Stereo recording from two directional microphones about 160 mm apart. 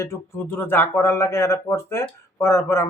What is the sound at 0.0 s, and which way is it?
Speech, 15° left (ahead or behind).